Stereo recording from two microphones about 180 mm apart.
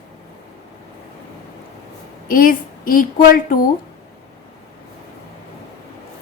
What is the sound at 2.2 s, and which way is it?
A woman's voice, 50° left (ahead or behind).